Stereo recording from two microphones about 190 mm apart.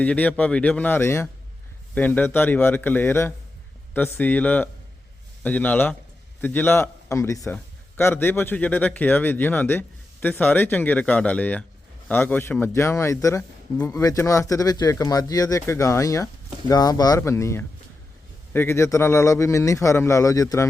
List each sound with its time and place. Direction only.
0.0 s speech: 5° left (ahead or behind)